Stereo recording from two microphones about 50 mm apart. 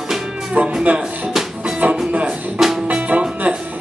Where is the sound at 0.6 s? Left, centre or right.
Right.